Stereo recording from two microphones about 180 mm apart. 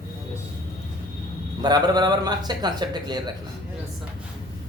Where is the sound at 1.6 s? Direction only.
25° right (ahead or behind).